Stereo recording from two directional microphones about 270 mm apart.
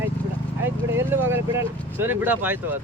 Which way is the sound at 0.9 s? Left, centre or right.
Centre.